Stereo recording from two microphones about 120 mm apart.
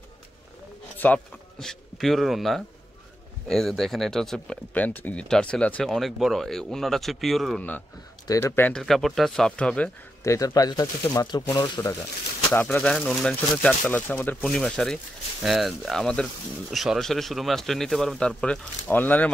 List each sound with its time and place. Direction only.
0.9 s speech: 15° left (ahead or behind)
1.6 s a man's voice: 5° left (ahead or behind)
8.4 s speech: 20° left (ahead or behind)
8.7 s speech: centre (ahead or behind)
10.2 s speech: 25° left (ahead or behind)
12.5 s speech: 10° left (ahead or behind)
14.4 s speech: 5° left (ahead or behind)